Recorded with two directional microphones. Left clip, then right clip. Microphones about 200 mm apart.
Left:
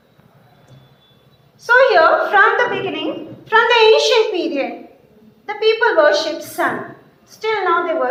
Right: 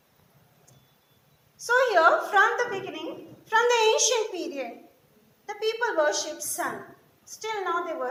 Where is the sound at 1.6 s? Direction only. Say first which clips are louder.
Left 9 dB; 50° right (ahead or behind).